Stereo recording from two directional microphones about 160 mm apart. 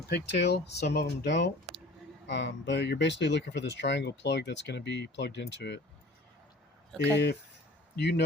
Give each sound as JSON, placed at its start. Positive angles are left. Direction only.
{"t": 0.1, "sound": "speech", "side_deg": 90}
{"t": 7.0, "sound": "speech", "side_deg": 90}